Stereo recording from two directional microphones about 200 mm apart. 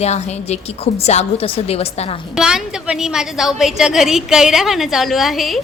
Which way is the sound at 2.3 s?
5° right (ahead or behind).